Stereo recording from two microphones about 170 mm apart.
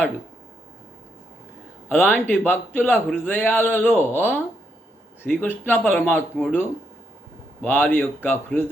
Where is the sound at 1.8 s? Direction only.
10° left (ahead or behind).